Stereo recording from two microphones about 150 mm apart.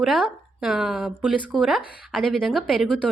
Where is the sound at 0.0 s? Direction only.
Centre (ahead or behind).